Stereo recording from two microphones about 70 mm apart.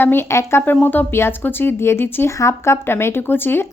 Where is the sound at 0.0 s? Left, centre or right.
Left.